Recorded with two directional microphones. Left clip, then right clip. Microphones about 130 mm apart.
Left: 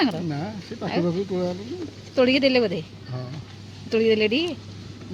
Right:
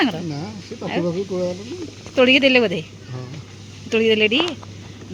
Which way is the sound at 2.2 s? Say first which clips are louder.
Right 5 dB; 10° right (ahead or behind).